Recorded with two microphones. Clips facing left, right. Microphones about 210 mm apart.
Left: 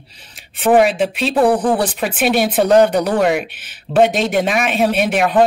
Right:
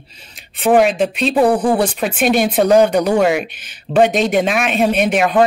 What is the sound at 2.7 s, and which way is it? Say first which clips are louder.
Speech: even; 10° right (ahead or behind).